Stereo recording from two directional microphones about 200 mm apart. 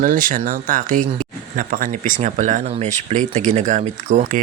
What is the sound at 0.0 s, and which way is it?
Speech, 45° right (ahead or behind).